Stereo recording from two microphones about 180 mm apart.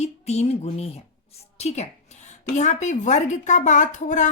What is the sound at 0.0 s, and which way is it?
A woman's voice, 35° left (ahead or behind).